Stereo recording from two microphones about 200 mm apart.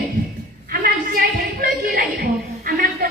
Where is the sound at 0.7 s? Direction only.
45° right (ahead or behind).